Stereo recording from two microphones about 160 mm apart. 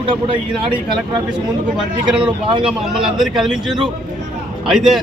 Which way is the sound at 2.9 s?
Centre (ahead or behind).